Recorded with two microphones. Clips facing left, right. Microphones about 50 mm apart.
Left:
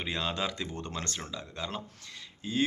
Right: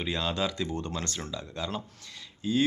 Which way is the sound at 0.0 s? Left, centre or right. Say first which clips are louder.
Right 3 dB; left.